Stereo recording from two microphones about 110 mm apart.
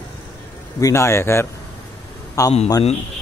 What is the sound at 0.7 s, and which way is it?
A man's voice, 30° left (ahead or behind).